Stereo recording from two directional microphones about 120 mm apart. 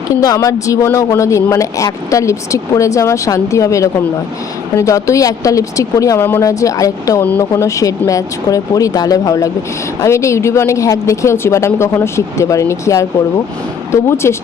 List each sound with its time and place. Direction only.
0.1 s speech: 25° left (ahead or behind)